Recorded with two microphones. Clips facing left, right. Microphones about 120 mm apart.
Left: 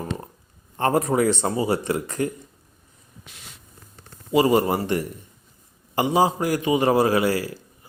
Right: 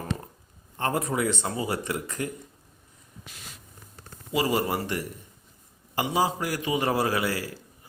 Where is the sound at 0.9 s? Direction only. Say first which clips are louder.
Left 7 dB; 40° left (ahead or behind).